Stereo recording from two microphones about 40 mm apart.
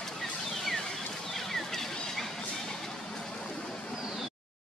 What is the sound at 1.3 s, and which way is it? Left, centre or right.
Vehicle, centre.